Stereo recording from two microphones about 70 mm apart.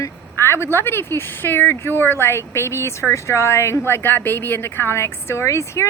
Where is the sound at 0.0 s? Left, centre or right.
Left.